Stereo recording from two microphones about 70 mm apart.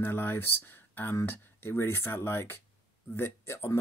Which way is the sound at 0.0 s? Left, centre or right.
Left.